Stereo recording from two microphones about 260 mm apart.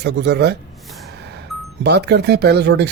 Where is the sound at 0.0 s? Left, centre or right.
Right.